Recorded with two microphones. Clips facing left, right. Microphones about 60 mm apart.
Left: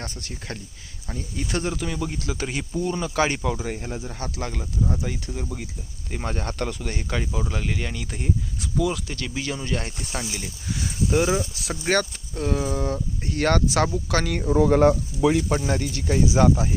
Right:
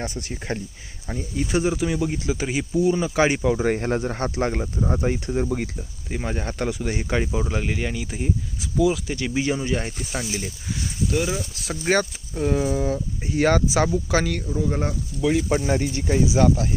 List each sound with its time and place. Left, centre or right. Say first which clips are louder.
0.0 s speech: right 5 dB; right
1.4 s speech: right 5 dB; centre
3.6 s speech: right 9 dB; right
6.1 s speech: right 1 dB; centre
9.1 s speech: right 6 dB; centre
11.1 s speech: left 4 dB; centre
11.5 s speech: even; centre
11.9 s speech: right 2 dB; centre
14.4 s speech: left 8 dB; left
15.3 s speech: right 3 dB; centre
15.8 s speech: right 1 dB; centre
16.4 s speech: left 2 dB; centre